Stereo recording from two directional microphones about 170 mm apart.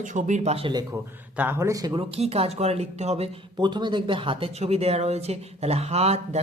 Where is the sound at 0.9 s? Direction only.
10° right (ahead or behind).